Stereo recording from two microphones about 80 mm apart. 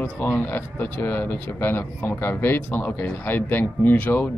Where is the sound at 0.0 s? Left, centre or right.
Left.